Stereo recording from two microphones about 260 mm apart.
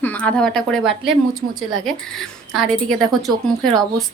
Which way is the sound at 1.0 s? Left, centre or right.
Right.